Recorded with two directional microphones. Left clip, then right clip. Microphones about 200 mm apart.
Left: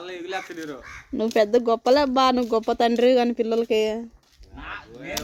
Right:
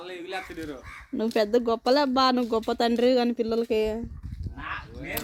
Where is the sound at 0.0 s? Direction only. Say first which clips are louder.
Left 4 dB; 35° left (ahead or behind).